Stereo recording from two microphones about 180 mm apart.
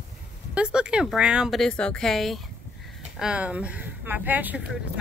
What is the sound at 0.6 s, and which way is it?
Speech, 5° right (ahead or behind).